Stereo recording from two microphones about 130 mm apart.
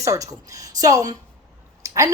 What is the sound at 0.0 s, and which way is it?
A woman's voice, 25° right (ahead or behind).